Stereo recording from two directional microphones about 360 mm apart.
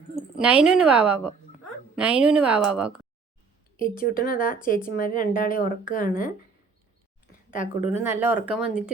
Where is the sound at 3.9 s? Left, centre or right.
Left.